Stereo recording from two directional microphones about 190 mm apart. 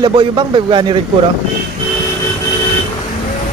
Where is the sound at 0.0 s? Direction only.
25° right (ahead or behind).